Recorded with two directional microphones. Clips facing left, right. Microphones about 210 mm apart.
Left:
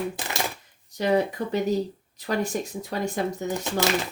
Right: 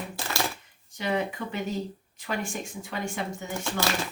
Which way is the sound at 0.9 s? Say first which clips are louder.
Left 6 dB; 40° left (ahead or behind).